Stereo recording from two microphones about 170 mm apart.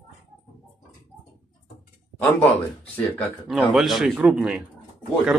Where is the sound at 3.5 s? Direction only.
5° right (ahead or behind).